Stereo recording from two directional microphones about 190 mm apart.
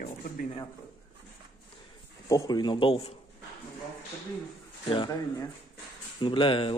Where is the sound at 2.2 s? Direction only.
20° left (ahead or behind).